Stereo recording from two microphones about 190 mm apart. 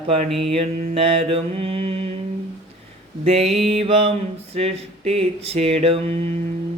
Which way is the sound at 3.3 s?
35° right (ahead or behind).